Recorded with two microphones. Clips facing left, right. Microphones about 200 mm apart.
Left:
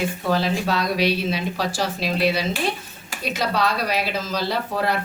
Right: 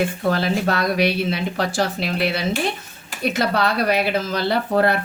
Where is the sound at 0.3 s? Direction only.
50° right (ahead or behind).